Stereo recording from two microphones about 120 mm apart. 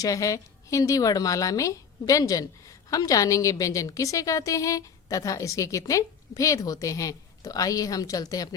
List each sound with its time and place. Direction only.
0.0 s a woman's voice: 30° left (ahead or behind)